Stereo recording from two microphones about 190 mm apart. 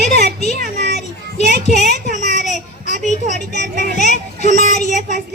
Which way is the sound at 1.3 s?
35° left (ahead or behind).